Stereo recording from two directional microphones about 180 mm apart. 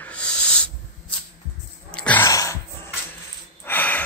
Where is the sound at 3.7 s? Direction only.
10° left (ahead or behind).